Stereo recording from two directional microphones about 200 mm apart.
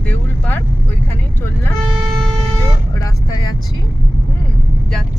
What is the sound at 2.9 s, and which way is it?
Speech, 15° left (ahead or behind).